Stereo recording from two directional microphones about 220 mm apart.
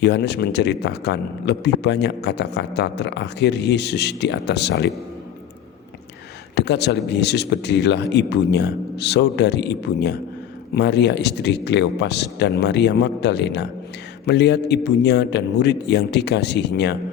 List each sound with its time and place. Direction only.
0.0 s a man's voice: 50° left (ahead or behind)
6.6 s a man's voice: 50° left (ahead or behind)